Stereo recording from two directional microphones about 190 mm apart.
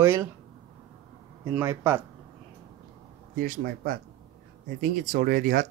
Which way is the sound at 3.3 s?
45° right (ahead or behind).